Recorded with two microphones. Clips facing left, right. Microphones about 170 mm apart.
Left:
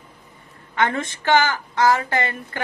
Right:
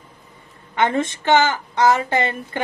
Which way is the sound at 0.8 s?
20° right (ahead or behind).